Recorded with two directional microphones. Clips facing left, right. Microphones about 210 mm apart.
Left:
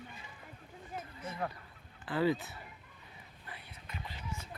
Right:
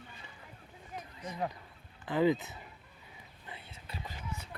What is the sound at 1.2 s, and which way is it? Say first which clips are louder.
Speech: right 3 dB; 15° right (ahead or behind).